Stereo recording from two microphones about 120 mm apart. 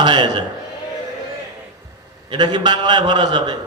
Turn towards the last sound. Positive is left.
turn(degrees=-40)  # may be behind; listen again after turning